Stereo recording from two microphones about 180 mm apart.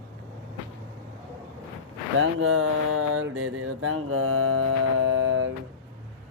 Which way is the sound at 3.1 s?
90° right.